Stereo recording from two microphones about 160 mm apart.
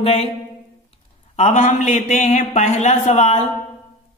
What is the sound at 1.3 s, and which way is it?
A man's voice, 40° left (ahead or behind).